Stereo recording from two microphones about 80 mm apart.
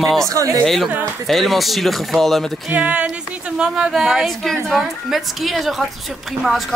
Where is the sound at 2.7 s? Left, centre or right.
Centre.